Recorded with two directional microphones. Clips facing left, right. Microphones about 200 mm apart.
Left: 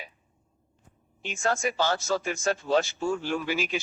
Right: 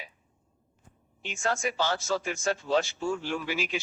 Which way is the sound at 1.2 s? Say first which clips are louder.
Left 2 dB; 45° left (ahead or behind).